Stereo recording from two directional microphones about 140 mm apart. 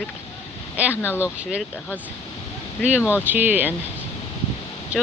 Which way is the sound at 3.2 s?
10° right (ahead or behind).